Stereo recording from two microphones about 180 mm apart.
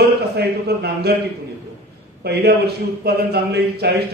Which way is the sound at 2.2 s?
60° right (ahead or behind).